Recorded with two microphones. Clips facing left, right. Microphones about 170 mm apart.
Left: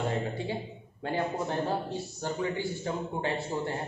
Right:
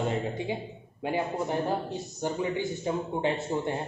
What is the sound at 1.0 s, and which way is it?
A man's voice, 15° right (ahead or behind).